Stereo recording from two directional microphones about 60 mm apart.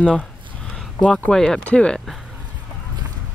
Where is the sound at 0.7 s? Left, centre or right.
Centre.